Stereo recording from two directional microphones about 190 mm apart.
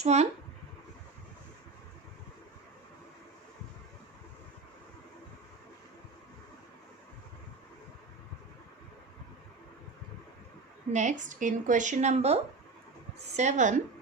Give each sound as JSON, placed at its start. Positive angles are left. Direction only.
{"t": 0.0, "sound": "a woman's voice", "side_deg": -35}
{"t": 10.9, "sound": "a woman's voice", "side_deg": -40}